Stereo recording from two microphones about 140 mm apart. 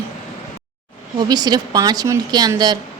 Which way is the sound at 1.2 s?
30° right (ahead or behind).